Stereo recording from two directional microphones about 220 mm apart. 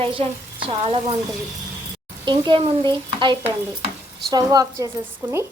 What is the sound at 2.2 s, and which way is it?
A woman's voice, 20° right (ahead or behind).